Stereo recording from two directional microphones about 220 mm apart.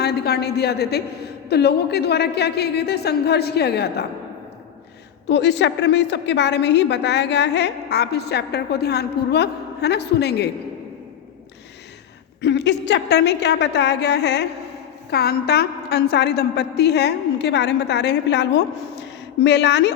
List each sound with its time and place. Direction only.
0.0 s a woman's voice: 45° left (ahead or behind)
5.3 s a woman's voice: 50° left (ahead or behind)
12.4 s a woman's voice: 50° left (ahead or behind)